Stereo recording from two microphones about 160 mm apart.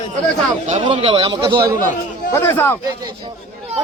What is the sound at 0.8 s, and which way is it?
Speech, 35° right (ahead or behind).